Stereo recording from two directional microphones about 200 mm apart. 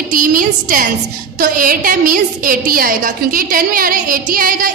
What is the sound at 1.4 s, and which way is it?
A woman's voice, 45° right (ahead or behind).